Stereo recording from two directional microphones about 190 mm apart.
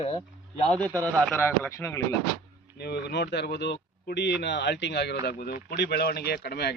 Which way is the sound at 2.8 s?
60° left (ahead or behind).